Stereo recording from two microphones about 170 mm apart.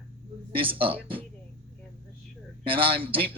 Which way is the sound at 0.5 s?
30° right (ahead or behind).